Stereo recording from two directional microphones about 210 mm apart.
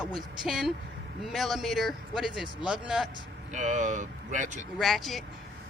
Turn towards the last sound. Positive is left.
turn(degrees=0)  # may be behind; listen again after turning